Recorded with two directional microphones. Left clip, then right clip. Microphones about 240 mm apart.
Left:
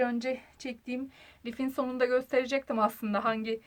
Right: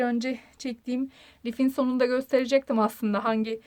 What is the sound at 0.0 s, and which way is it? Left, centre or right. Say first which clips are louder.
Speech: right 2 dB; right.